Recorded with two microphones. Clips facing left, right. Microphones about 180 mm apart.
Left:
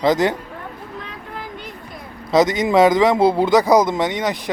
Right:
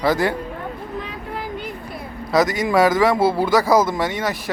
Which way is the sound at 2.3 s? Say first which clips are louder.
Left 2 dB; 20° left (ahead or behind).